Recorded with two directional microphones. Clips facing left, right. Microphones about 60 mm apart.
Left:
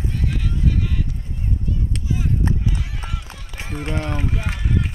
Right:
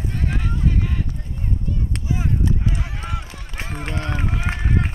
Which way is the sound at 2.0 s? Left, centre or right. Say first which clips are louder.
Right 1 dB; right.